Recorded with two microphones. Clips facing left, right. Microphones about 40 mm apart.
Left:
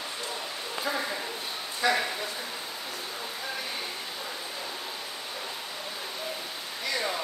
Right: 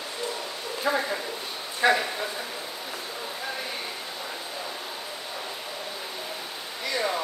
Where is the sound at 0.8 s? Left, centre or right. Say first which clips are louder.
Right 5 dB; right.